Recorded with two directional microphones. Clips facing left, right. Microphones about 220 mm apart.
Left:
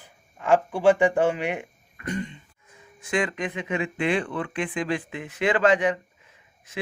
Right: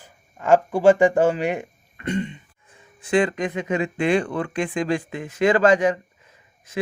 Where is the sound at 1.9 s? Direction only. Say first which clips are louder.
Right 5 dB; 25° right (ahead or behind).